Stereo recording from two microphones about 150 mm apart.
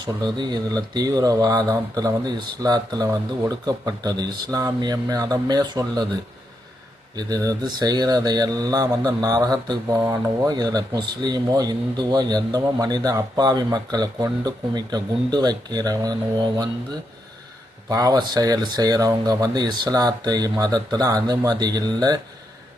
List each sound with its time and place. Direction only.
0.0 s speech: 30° right (ahead or behind)
7.2 s speech: 25° right (ahead or behind)
17.8 s speech: 25° right (ahead or behind)